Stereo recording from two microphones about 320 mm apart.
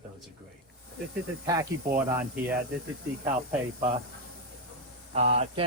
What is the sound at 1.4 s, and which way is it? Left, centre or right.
Speech, centre.